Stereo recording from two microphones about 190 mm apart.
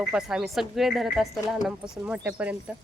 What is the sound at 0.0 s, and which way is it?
Speech, 5° right (ahead or behind).